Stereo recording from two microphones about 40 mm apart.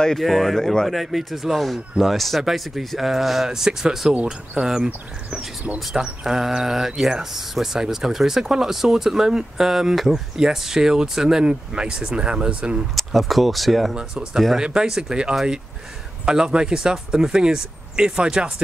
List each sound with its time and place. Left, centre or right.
0.1 s speech: centre
5.9 s speech: centre
12.9 s speech: centre
13.9 s speech: right